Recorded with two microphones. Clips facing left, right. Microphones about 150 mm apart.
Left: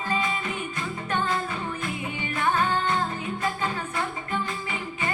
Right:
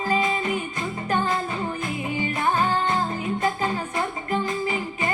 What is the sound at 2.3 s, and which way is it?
Music, 35° right (ahead or behind).